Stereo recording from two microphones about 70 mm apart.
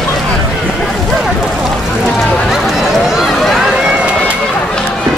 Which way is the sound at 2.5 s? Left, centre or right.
Centre.